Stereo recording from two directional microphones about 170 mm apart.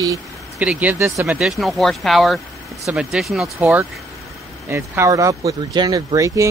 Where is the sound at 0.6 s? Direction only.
10° right (ahead or behind).